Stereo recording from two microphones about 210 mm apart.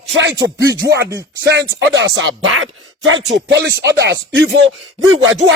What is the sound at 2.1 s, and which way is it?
Speech, 65° right (ahead or behind).